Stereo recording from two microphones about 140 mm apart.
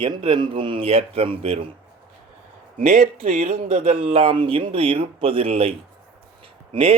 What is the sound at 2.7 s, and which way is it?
Speech, 65° right (ahead or behind).